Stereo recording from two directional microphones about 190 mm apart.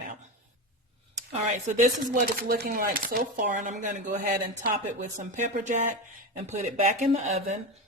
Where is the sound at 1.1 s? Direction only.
40° right (ahead or behind).